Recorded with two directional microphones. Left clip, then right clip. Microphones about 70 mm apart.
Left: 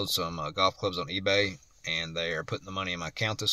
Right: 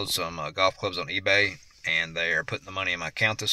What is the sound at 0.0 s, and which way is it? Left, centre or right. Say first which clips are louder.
Speech: right 1 dB; left.